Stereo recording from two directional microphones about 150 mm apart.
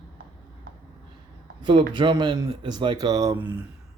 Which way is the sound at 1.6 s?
35° right (ahead or behind).